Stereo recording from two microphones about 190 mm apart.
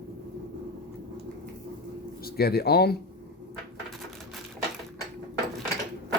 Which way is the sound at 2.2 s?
55° left (ahead or behind).